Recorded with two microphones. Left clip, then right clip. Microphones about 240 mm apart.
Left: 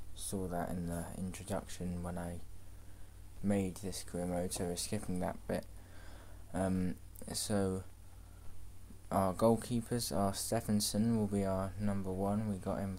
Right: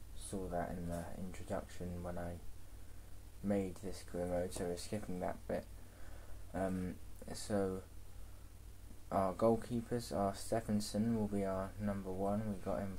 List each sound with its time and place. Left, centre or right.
0.3 s speech: left
3.4 s speech: left
9.1 s speech: left